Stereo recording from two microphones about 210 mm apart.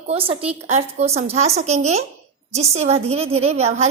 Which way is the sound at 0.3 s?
25° right (ahead or behind).